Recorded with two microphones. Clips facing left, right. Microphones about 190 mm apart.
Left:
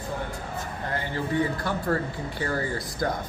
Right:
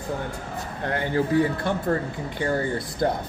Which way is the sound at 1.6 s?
20° right (ahead or behind).